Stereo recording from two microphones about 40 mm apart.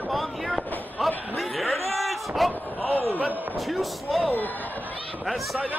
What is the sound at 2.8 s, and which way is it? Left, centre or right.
Speech, left.